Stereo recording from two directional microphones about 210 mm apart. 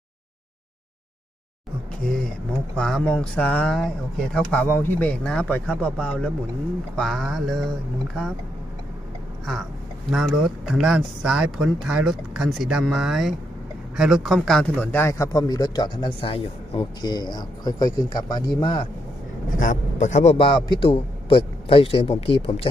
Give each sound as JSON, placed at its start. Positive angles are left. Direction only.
{"t": 2.7, "sound": "speech", "side_deg": 5}
{"t": 10.1, "sound": "a man's voice", "side_deg": 0}
{"t": 19.5, "sound": "a man's voice", "side_deg": 35}